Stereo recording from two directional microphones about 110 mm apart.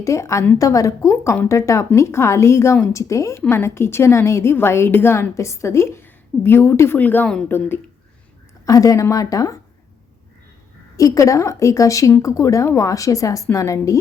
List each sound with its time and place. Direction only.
0.0 s a woman's voice: 30° left (ahead or behind)
8.6 s speech: 30° left (ahead or behind)
10.9 s a woman's voice: 30° left (ahead or behind)